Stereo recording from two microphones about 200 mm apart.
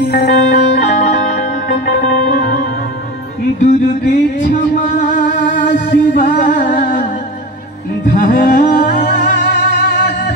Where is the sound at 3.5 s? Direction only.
40° left (ahead or behind).